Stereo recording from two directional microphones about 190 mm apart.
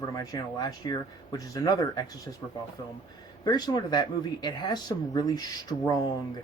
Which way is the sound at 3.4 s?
20° left (ahead or behind).